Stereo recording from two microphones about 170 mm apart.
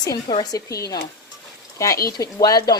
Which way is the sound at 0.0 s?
25° left (ahead or behind).